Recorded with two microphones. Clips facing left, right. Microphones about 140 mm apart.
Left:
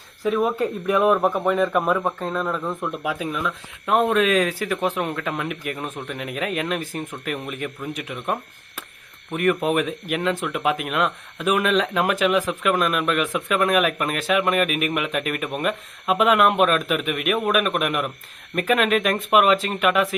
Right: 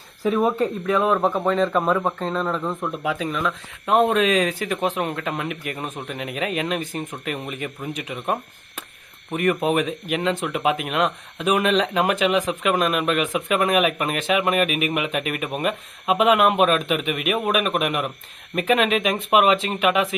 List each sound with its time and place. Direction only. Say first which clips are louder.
0.2 s speech: right 1 dB; 5° right (ahead or behind)
0.9 s speech: left 2 dB; 15° left (ahead or behind)
4.1 s speech: even; 10° right (ahead or behind)
7.3 s speech: even; 10° right (ahead or behind)
10.4 s speech: right 1 dB; 10° right (ahead or behind)
10.9 s speech: right 1 dB; 15° right (ahead or behind)
11.8 s speech: right 1 dB; 5° left (ahead or behind)
12.2 s speech: even; 15° right (ahead or behind)